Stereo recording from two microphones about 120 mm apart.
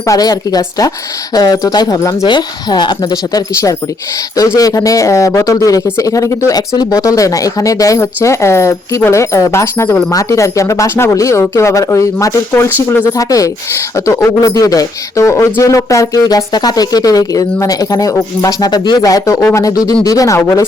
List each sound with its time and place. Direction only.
0.0 s speech: 30° left (ahead or behind)